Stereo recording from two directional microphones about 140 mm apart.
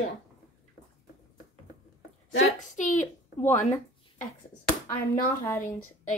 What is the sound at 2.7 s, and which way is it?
Speech, 65° left (ahead or behind).